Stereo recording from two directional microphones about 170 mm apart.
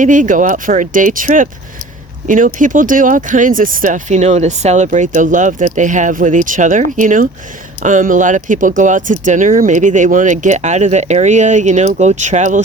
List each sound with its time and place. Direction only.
0.0 s speech: 50° right (ahead or behind)